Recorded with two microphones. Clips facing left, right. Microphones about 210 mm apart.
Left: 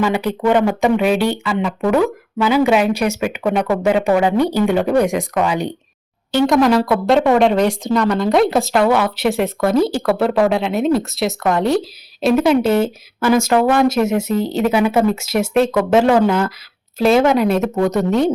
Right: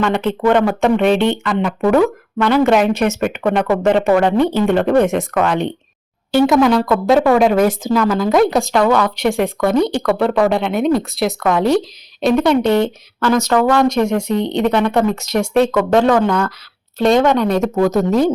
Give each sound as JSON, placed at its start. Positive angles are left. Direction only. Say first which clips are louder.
{"t": 0.0, "sound": "speech", "louder": "right 1 dB", "side_deg": 10}
{"t": 6.3, "sound": "speech", "louder": "right 1 dB", "side_deg": 0}